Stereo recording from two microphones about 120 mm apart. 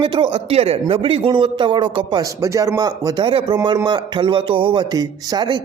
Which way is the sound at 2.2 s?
25° right (ahead or behind).